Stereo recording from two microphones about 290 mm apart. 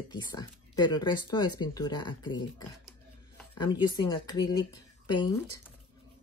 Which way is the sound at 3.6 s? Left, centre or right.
Centre.